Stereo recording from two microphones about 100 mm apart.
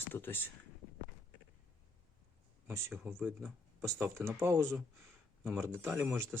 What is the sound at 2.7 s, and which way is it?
Speech, 20° right (ahead or behind).